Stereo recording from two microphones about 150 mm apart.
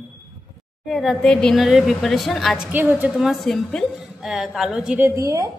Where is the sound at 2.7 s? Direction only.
10° right (ahead or behind).